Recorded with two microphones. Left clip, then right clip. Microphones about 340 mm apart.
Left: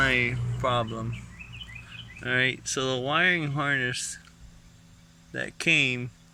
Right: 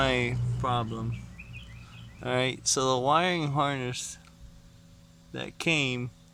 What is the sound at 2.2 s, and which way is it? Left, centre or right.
Speech, centre.